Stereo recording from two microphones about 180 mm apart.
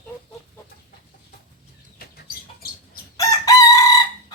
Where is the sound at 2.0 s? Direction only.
55° left (ahead or behind).